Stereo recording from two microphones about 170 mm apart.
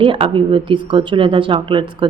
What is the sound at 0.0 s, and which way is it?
Speech, 30° right (ahead or behind).